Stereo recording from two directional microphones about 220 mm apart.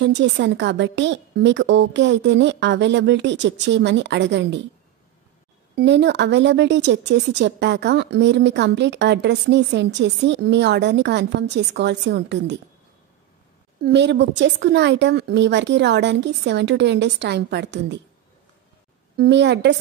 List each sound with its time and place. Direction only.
0.0 s a woman's voice: 55° right (ahead or behind)
5.8 s a woman's voice: 50° right (ahead or behind)
13.8 s a woman's voice: 50° right (ahead or behind)
19.1 s a woman's voice: 50° right (ahead or behind)